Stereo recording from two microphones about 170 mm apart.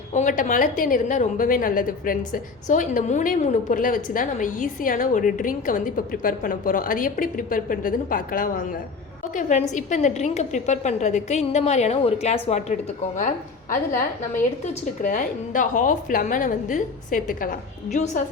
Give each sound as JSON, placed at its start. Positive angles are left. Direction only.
{"t": 0.1, "sound": "a woman's voice", "side_deg": 50}
{"t": 14.6, "sound": "a woman's voice", "side_deg": 45}